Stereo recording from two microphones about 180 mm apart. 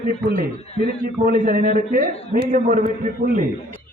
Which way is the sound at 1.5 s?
50° right (ahead or behind).